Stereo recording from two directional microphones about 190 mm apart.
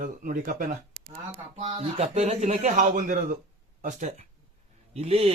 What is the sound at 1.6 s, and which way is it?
Speech, 30° right (ahead or behind).